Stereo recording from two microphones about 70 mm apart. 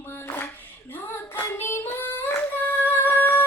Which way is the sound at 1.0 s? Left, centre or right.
Left.